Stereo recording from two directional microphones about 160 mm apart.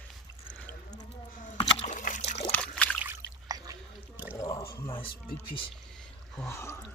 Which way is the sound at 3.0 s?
15° right (ahead or behind).